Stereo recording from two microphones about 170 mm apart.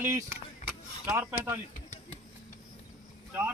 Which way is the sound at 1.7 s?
45° left (ahead or behind).